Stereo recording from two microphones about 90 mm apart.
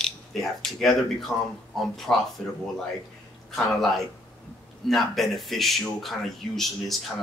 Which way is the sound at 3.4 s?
5° left (ahead or behind).